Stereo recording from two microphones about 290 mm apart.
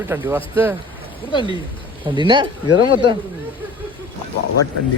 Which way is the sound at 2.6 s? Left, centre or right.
Left.